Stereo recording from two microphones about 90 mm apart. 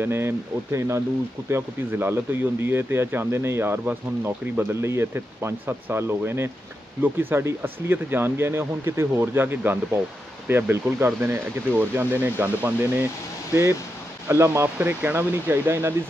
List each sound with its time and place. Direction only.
0.0 s speech: 25° right (ahead or behind)
14.2 s speech: 30° right (ahead or behind)